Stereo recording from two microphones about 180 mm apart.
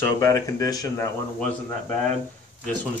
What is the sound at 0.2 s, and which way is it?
Speech, 20° left (ahead or behind).